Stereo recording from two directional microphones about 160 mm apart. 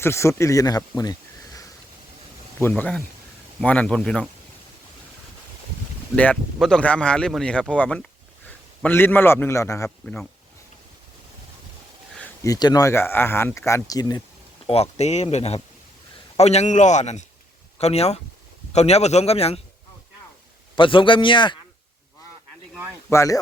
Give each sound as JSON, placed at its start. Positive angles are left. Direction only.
{"t": 0.0, "sound": "speech", "side_deg": 15}
{"t": 2.6, "sound": "speech", "side_deg": 10}
{"t": 6.1, "sound": "a man's voice", "side_deg": 5}
{"t": 12.4, "sound": "speech", "side_deg": 25}
{"t": 14.7, "sound": "speech", "side_deg": 40}
{"t": 20.7, "sound": "a man's voice", "side_deg": 30}
{"t": 23.0, "sound": "speech", "side_deg": 20}